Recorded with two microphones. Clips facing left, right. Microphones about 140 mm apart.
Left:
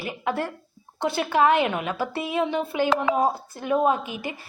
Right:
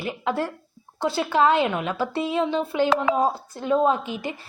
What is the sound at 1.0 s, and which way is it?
A woman's voice, 15° left (ahead or behind).